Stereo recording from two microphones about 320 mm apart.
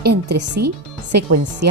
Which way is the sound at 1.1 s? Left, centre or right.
Right.